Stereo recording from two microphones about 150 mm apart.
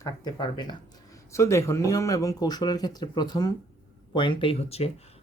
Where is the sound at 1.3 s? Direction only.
20° left (ahead or behind).